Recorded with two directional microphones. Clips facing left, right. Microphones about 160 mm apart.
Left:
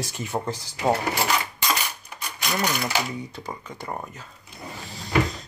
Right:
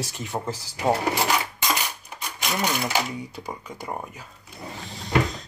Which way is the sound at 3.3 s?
10° right (ahead or behind).